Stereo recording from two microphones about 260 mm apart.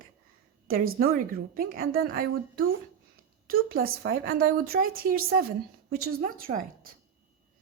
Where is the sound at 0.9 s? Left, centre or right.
Right.